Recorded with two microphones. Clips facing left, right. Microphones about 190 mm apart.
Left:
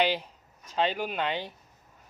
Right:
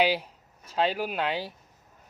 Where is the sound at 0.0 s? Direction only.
10° right (ahead or behind).